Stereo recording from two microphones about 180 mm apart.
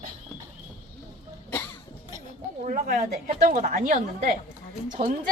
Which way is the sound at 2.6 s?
45° right (ahead or behind).